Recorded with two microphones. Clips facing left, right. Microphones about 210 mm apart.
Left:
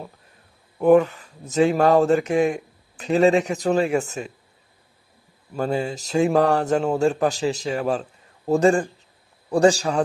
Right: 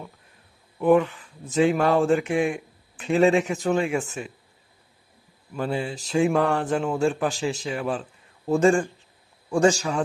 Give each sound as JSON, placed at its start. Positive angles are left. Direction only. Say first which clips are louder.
{"t": 0.8, "sound": "speech", "louder": "left 3 dB", "side_deg": 45}
{"t": 5.5, "sound": "speech", "louder": "left 3 dB", "side_deg": 40}